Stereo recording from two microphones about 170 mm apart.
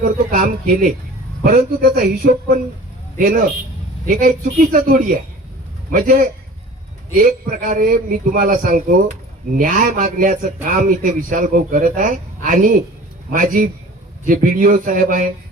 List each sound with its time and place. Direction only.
0.0 s a man's voice: 60° right (ahead or behind)